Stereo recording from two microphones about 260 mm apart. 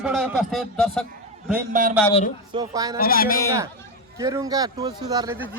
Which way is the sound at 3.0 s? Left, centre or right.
Left.